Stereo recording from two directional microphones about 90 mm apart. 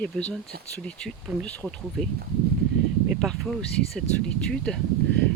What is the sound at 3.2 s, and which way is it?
Speech, 5° left (ahead or behind).